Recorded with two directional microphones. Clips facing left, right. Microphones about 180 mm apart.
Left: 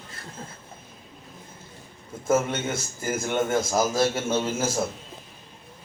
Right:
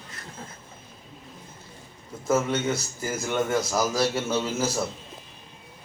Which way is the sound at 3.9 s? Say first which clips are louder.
Left 1 dB; 50° left (ahead or behind).